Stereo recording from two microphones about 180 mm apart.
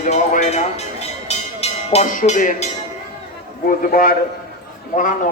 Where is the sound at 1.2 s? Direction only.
35° left (ahead or behind).